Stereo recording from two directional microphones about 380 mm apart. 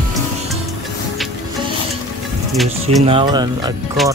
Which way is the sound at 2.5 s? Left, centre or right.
Centre.